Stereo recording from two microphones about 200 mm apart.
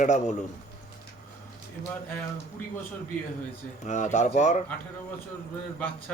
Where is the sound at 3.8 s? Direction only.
35° left (ahead or behind).